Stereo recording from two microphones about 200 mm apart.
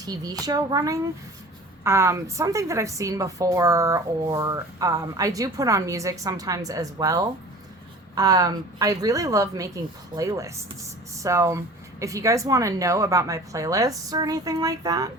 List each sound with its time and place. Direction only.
0.0 s a woman's voice: 20° right (ahead or behind)